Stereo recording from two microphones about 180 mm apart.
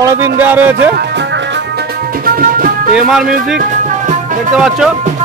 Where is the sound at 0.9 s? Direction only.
75° right (ahead or behind).